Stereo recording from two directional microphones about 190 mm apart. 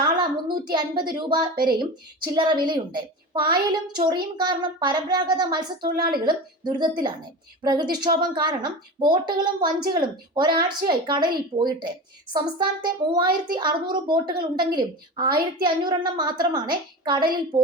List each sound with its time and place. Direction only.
0.0 s a woman's voice: 25° right (ahead or behind)